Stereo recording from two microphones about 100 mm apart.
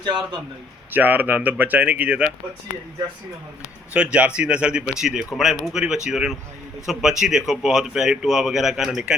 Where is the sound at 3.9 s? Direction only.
10° right (ahead or behind).